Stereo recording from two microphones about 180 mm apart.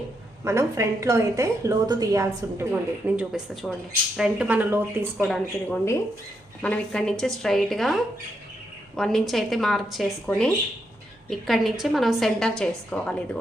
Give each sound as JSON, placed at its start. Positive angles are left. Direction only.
{"t": 0.4, "sound": "a woman's voice", "side_deg": -15}
{"t": 3.2, "sound": "a woman's voice", "side_deg": 0}
{"t": 5.2, "sound": "a woman's voice", "side_deg": 5}